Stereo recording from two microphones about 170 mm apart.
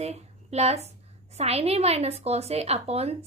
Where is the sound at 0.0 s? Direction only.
40° right (ahead or behind).